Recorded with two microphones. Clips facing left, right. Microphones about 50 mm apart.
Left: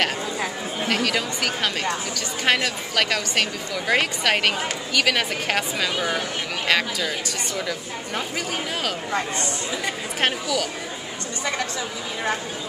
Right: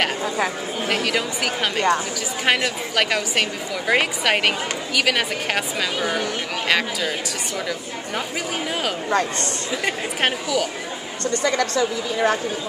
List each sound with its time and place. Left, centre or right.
0.8 s a woman's voice: centre
10.2 s a woman's voice: centre
11.4 s a woman's voice: right